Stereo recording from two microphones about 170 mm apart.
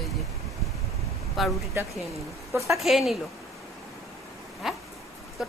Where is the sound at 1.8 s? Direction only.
15° right (ahead or behind).